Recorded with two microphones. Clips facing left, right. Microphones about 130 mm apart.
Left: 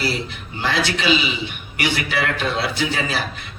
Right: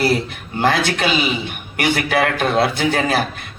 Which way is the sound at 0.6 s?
50° right (ahead or behind).